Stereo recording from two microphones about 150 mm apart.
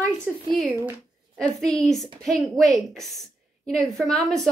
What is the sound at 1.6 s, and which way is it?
A woman's voice, 5° left (ahead or behind).